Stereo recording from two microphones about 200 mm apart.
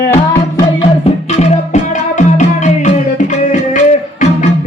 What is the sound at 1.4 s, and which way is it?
Music, 35° left (ahead or behind).